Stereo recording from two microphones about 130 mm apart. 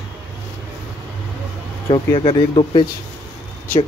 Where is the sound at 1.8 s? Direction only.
35° left (ahead or behind).